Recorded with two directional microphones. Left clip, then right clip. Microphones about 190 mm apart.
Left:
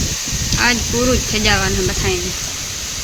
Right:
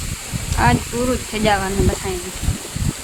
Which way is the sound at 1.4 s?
20° right (ahead or behind).